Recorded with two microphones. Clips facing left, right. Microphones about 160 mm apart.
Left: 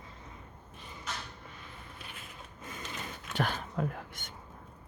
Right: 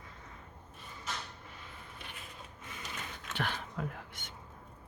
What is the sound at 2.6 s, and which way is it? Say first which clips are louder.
Printer: left 6 dB; 40° left (ahead or behind).